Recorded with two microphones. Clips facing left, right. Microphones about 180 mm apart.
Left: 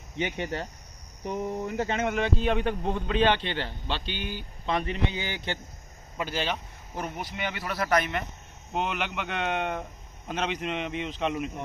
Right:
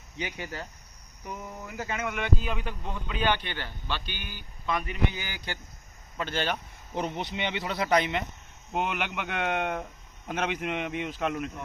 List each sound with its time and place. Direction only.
0.2 s speech: 25° left (ahead or behind)
6.1 s speech: 5° left (ahead or behind)
7.0 s a man's voice: 20° right (ahead or behind); by 11.3 s 5° right (ahead or behind)